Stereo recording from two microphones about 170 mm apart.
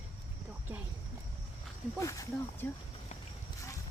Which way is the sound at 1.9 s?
15° left (ahead or behind).